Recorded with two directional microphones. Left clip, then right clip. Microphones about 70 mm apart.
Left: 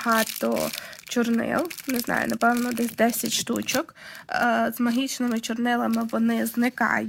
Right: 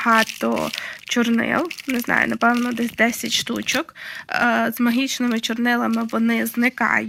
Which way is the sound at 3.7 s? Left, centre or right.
Left.